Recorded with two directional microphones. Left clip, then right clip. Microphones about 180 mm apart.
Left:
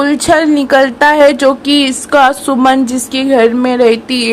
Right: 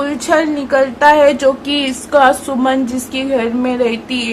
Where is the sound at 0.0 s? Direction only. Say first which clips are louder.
Left 5 dB; 40° left (ahead or behind).